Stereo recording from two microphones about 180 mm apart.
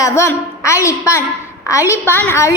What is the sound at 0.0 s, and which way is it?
A woman's voice, 15° left (ahead or behind).